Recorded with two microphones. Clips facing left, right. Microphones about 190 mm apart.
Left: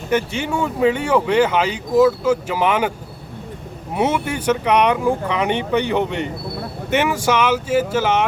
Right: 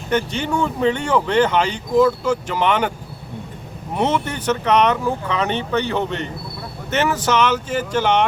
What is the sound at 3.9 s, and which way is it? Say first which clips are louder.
Speech: left 1 dB; 10° left (ahead or behind).